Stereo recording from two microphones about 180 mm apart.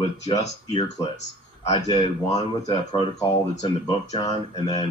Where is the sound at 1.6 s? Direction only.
25° left (ahead or behind).